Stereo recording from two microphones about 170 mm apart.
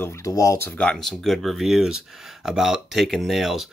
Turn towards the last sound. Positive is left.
turn(degrees=0)  # may be behind; listen again after turning